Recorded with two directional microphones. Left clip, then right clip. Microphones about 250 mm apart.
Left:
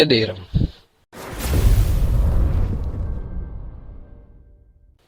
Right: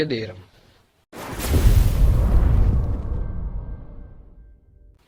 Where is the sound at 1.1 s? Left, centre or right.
Centre.